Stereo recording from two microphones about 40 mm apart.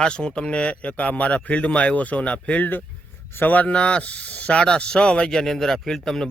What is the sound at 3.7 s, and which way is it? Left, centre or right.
Speech, left.